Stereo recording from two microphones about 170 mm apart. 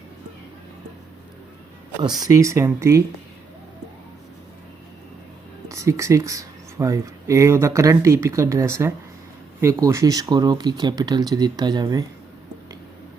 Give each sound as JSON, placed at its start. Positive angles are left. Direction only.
{"t": 2.0, "sound": "speech", "side_deg": -25}
{"t": 5.6, "sound": "speech", "side_deg": -20}